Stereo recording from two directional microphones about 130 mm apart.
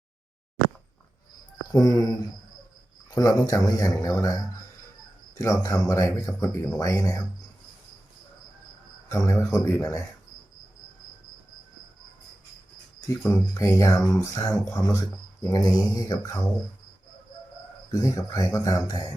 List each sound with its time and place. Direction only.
1.7 s speech: 30° left (ahead or behind)
3.2 s speech: 25° left (ahead or behind)
5.4 s speech: 25° left (ahead or behind)
9.0 s speech: 25° left (ahead or behind)
13.2 s speech: 25° left (ahead or behind)
17.9 s speech: 25° left (ahead or behind)